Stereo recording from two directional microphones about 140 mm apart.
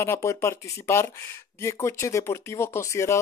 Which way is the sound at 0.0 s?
20° left (ahead or behind).